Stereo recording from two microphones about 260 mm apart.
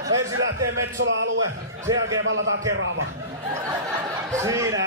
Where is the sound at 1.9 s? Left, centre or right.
Centre.